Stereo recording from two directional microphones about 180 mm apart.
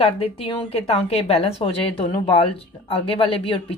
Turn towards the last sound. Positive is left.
turn(degrees=30)  # may be behind; listen again after turning